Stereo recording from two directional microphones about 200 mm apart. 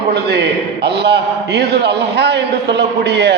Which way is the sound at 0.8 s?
55° right (ahead or behind).